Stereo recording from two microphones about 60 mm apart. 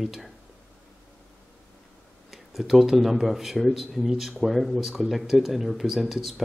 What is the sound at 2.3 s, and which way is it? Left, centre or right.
Speech, centre.